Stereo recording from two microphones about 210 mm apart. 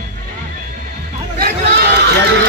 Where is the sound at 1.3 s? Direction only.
50° right (ahead or behind).